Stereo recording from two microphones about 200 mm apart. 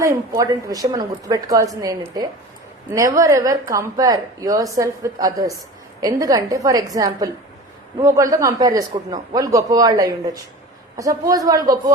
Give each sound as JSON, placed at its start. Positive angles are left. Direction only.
{"t": 0.0, "sound": "speech", "side_deg": -15}